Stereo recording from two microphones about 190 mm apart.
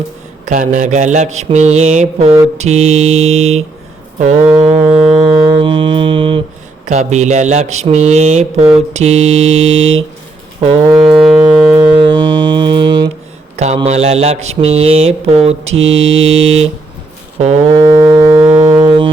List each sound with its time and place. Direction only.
0.4 s mantra: 40° right (ahead or behind)
4.9 s music: centre (ahead or behind)
5.2 s music: 25° right (ahead or behind)
6.8 s mantra: 40° right (ahead or behind)
9.6 s mantra: 90° right
10.6 s music: 30° right (ahead or behind)
11.1 s music: centre (ahead or behind)
11.9 s music: 25° right (ahead or behind)
13.6 s mantra: 35° right (ahead or behind)
15.7 s mantra: 90° right
17.3 s mantra: 35° right (ahead or behind)
17.7 s music: 20° right (ahead or behind)